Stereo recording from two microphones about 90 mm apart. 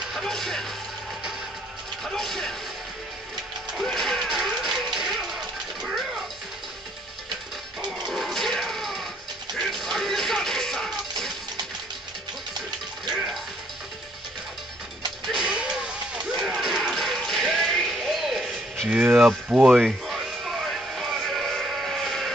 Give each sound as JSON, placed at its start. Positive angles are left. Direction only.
{"t": 0.1, "sound": "speech", "side_deg": 5}
{"t": 2.0, "sound": "speech", "side_deg": 5}
{"t": 3.7, "sound": "music", "side_deg": 5}
{"t": 8.1, "sound": "music", "side_deg": 0}
{"t": 13.1, "sound": "music", "side_deg": 0}
{"t": 15.2, "sound": "a sound", "side_deg": -10}
{"t": 18.9, "sound": "speech", "side_deg": -15}
{"t": 20.1, "sound": "music", "side_deg": 0}